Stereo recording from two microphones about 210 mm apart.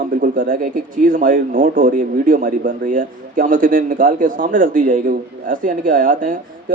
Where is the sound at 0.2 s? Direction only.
40° right (ahead or behind).